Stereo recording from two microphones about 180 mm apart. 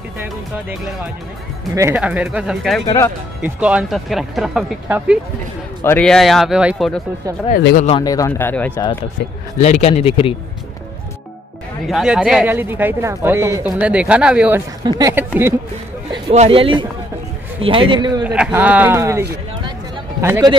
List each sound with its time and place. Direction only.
2.0 s speech: 5° right (ahead or behind)
5.9 s speech: 5° left (ahead or behind)
7.7 s a man's voice: 35° left (ahead or behind)
8.0 s speech: 20° left (ahead or behind)
9.6 s a man's voice: 40° left (ahead or behind)
11.9 s speech: 5° right (ahead or behind)
14.8 s speech: 20° right (ahead or behind)
16.1 s a man's voice: 30° right (ahead or behind)
18.2 s speech: 5° right (ahead or behind)